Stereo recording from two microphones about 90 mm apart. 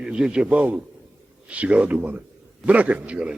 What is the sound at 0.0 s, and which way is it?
A man's voice, 10° right (ahead or behind).